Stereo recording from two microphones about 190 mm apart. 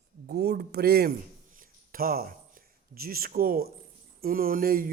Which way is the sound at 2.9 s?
50° right (ahead or behind).